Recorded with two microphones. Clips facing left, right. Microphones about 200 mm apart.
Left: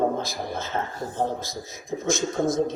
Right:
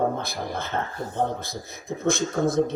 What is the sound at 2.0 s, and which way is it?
Speech, 60° right (ahead or behind).